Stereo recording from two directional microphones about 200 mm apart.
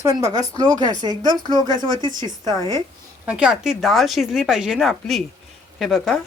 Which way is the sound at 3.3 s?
5° right (ahead or behind).